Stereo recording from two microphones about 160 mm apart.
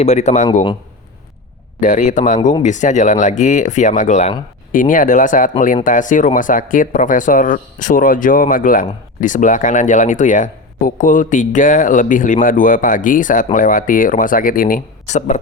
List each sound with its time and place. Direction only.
0.0 s speech: 45° left (ahead or behind)
1.8 s speech: 50° left (ahead or behind)